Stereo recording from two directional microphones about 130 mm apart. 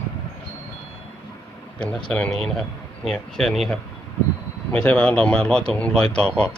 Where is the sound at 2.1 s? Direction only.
5° left (ahead or behind).